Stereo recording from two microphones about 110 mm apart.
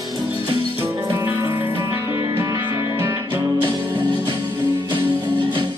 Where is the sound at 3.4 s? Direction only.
40° right (ahead or behind).